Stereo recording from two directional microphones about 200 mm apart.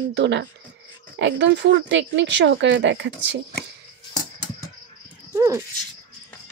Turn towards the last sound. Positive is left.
turn(degrees=-15)  # may be behind; listen again after turning